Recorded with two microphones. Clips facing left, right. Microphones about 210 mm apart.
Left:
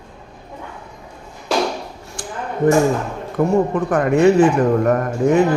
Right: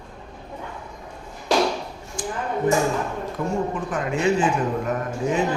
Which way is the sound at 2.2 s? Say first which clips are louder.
Right 3 dB; 65° left (ahead or behind).